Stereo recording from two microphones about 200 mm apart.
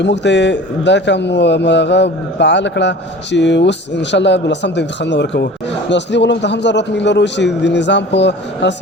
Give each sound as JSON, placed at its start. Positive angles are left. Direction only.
{"t": 0.0, "sound": "speech", "side_deg": 60}